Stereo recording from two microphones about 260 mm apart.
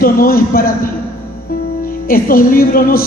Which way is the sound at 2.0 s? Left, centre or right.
Left.